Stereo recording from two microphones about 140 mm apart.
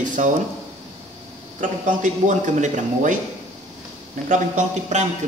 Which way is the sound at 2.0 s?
60° right (ahead or behind).